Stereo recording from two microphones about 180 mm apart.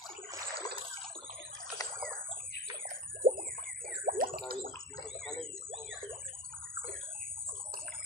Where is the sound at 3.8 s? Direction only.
50° right (ahead or behind).